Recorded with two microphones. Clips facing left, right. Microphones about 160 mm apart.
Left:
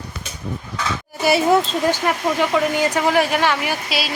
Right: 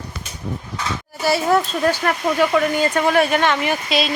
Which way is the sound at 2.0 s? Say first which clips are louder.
Right 1 dB; 15° left (ahead or behind).